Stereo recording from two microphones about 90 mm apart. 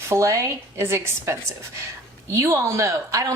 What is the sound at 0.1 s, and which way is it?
A woman's voice, 35° right (ahead or behind).